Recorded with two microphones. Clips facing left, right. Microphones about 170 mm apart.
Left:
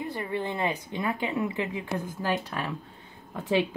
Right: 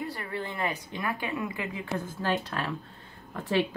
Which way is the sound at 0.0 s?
20° left (ahead or behind).